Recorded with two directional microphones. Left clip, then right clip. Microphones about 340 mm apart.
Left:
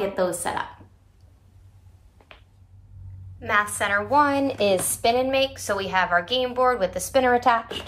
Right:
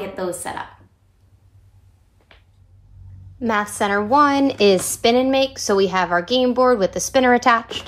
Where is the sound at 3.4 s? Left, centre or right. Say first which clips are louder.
Right 2 dB; centre.